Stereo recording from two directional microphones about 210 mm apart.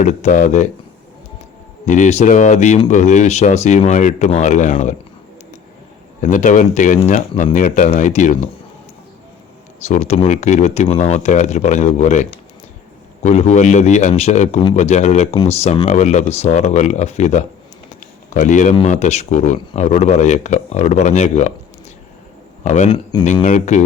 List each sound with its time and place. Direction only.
0.0 s speech: 35° left (ahead or behind)
1.9 s speech: 35° left (ahead or behind)
6.2 s speech: 35° left (ahead or behind)
9.8 s speech: 35° left (ahead or behind)
18.0 s a sound: 35° left (ahead or behind)
18.9 s speech: 30° left (ahead or behind)
22.6 s speech: 35° left (ahead or behind)